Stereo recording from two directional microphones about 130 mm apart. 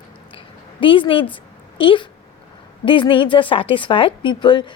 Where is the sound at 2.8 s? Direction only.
40° left (ahead or behind).